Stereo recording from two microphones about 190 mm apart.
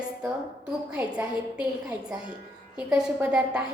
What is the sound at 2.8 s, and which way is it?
Speech, 5° right (ahead or behind).